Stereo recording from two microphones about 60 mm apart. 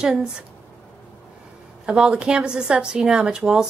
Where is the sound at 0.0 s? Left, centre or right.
Centre.